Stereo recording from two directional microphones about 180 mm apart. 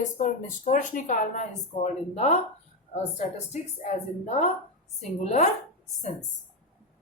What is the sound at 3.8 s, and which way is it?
A woman's voice, 40° left (ahead or behind).